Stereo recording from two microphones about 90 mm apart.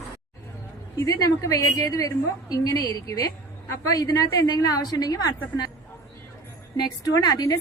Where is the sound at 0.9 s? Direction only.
40° left (ahead or behind).